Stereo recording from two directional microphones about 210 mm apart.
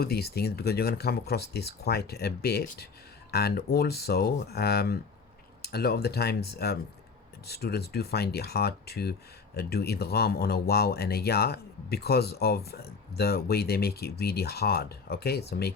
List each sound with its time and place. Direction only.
0.0 s speech: 50° left (ahead or behind)